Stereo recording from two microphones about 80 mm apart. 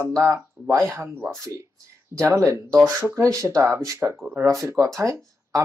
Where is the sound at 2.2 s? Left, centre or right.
Right.